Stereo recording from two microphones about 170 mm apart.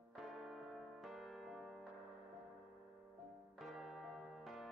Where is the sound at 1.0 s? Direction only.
Centre (ahead or behind).